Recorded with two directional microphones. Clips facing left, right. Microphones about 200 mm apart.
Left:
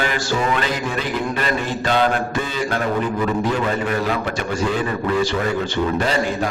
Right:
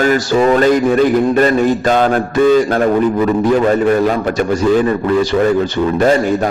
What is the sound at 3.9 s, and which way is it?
Mantra, 45° right (ahead or behind).